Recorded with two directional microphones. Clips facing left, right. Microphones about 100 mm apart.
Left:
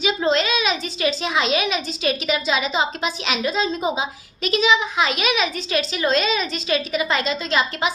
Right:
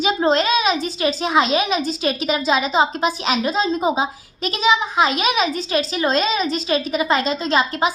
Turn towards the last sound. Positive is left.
turn(degrees=-35)  # may be behind; listen again after turning